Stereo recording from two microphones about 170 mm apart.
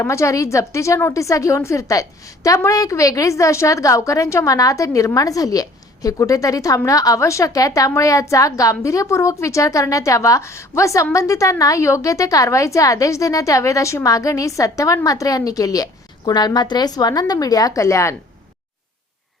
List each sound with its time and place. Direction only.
0.0 s a woman's voice: 15° left (ahead or behind)